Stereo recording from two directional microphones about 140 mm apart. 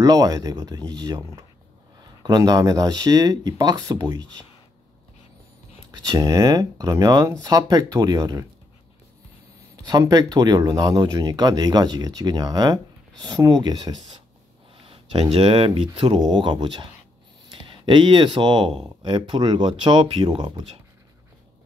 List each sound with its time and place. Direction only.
0.0 s speech: 25° right (ahead or behind)
5.9 s speech: 25° right (ahead or behind)
9.8 s speech: 25° right (ahead or behind)